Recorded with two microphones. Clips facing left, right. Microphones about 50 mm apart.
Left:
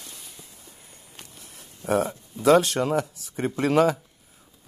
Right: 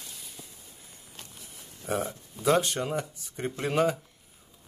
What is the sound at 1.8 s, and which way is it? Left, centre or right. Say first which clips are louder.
Speech: left 7 dB; left.